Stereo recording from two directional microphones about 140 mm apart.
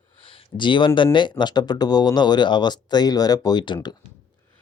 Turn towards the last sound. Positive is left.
turn(degrees=30)  # may be behind; listen again after turning